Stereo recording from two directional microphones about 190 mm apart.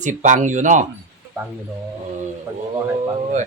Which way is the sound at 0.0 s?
40° right (ahead or behind).